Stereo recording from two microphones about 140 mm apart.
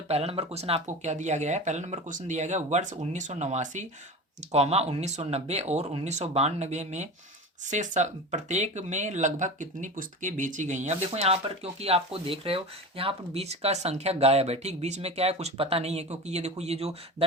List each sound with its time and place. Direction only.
0.1 s speech: 45° right (ahead or behind)